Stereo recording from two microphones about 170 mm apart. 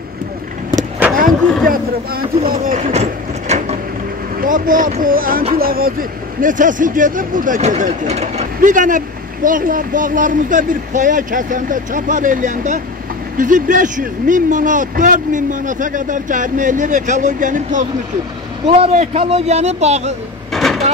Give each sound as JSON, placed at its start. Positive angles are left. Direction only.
{"t": 0.7, "sound": "vehicle", "side_deg": -15}
{"t": 1.7, "sound": "speech", "side_deg": -55}
{"t": 4.4, "sound": "speech", "side_deg": -50}
{"t": 8.5, "sound": "a man's voice", "side_deg": -50}
{"t": 20.5, "sound": "vehicle", "side_deg": 0}